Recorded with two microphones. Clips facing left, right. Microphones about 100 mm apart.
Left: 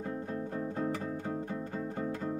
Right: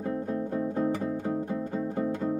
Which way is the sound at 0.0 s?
5° right (ahead or behind).